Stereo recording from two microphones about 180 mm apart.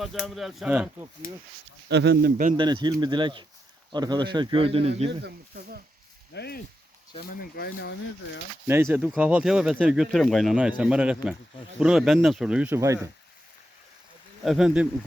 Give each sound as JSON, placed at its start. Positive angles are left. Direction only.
{"t": 0.0, "sound": "speech", "side_deg": 0}
{"t": 1.9, "sound": "speech", "side_deg": -70}
{"t": 2.6, "sound": "a man's voice", "side_deg": -25}
{"t": 6.3, "sound": "speech", "side_deg": 65}
{"t": 8.6, "sound": "speech", "side_deg": -15}
{"t": 14.4, "sound": "speech", "side_deg": -5}